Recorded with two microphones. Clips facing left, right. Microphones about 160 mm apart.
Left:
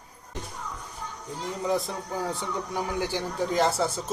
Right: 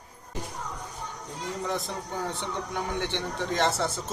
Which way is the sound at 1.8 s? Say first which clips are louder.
Left 2 dB; 5° left (ahead or behind).